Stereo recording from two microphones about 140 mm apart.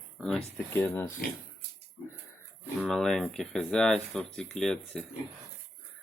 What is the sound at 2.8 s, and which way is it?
Speech, 5° left (ahead or behind).